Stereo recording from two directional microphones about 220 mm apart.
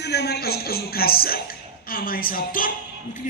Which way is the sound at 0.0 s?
50° left (ahead or behind).